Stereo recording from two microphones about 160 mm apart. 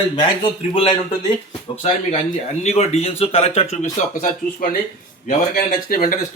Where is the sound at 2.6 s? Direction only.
40° left (ahead or behind).